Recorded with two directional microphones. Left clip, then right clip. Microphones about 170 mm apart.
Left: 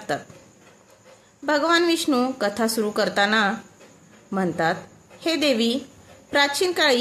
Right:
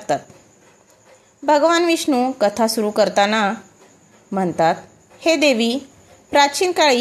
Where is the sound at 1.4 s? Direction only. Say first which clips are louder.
Right 5 dB; 20° right (ahead or behind).